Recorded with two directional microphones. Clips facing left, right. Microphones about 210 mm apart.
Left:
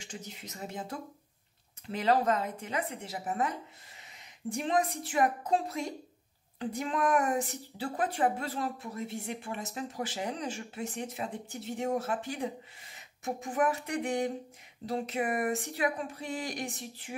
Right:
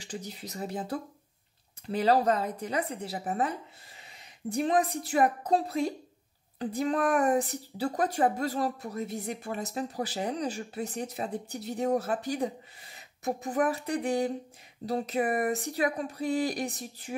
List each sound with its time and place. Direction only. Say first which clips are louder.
0.0 s speech: right 5 dB; 35° right (ahead or behind)